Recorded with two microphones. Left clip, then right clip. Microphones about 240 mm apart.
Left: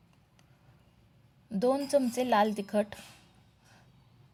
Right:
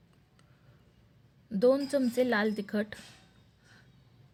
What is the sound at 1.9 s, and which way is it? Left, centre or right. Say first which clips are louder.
Speech: left 2 dB; centre.